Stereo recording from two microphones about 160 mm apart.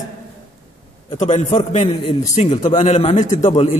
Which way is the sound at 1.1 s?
50° left (ahead or behind).